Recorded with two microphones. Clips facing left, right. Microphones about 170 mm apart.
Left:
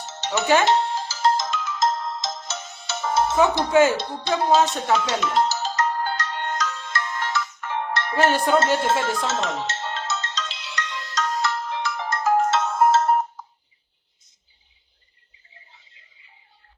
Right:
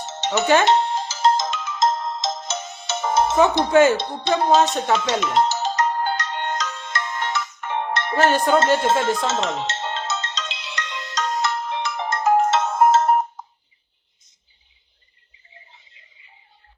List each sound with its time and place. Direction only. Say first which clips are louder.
0.0 s music: right 3 dB; 20° right (ahead or behind)
0.6 s ringtone: right 2 dB; 20° right (ahead or behind)
3.7 s speech: right 2 dB; 5° left (ahead or behind)
3.9 s music: right 3 dB; 20° right (ahead or behind)